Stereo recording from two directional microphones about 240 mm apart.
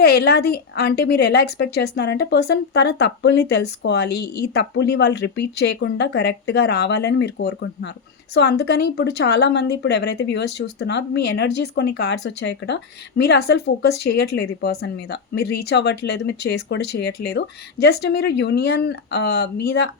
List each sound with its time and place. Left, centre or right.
0.0 s speech: left